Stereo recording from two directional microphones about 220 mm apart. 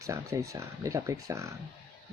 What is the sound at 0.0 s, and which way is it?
Speech, 15° right (ahead or behind).